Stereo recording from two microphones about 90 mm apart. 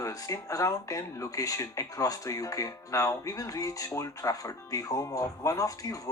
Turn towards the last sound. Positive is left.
turn(degrees=35)  # may be behind; listen again after turning